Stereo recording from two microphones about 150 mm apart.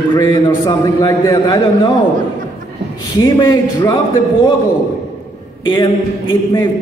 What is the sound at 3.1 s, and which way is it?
Speech, 30° left (ahead or behind).